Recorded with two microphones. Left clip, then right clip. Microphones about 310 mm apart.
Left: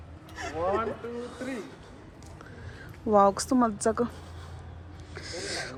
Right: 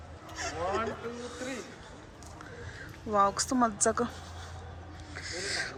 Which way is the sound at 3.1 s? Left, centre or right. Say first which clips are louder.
Left 5 dB; centre.